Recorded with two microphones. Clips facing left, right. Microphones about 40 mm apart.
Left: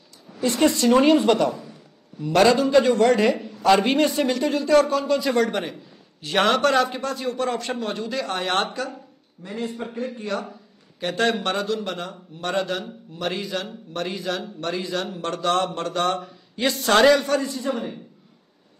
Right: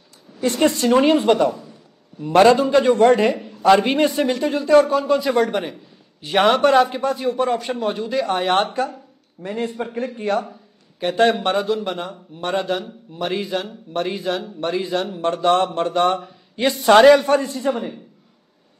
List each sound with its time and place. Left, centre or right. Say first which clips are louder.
0.7 s a man's voice: left 1 dB; centre
2.2 s a man's voice: right 4 dB; right; by 4.6 s centre
4.6 s a man's voice: right 4 dB; right
4.8 s speech: right 3 dB; centre
9.4 s a man's voice: right 5 dB; right
11.0 s speech: right 5 dB; centre
17.1 s a man's voice: right 5 dB; right
17.4 s speech: right 2 dB; right
17.6 s speech: right 4 dB; centre